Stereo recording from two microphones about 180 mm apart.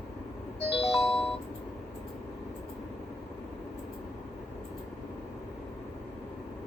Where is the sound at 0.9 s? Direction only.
Centre (ahead or behind).